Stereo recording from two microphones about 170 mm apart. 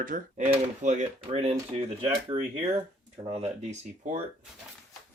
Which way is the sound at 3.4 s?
45° right (ahead or behind).